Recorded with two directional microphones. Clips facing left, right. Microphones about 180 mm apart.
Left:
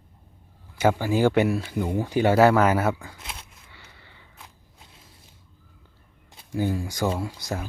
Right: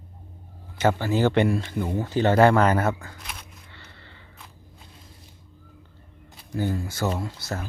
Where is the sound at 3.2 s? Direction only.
25° left (ahead or behind).